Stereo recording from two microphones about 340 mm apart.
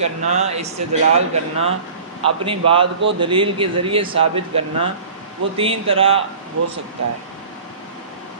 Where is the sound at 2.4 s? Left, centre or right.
Centre.